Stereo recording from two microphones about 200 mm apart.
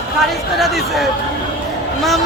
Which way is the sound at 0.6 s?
Centre (ahead or behind).